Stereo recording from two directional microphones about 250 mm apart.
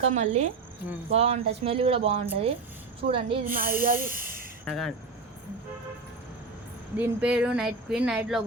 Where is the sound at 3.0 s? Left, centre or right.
Right.